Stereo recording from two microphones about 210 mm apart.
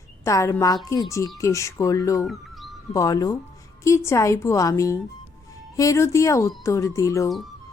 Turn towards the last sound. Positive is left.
turn(degrees=15)  # may be behind; listen again after turning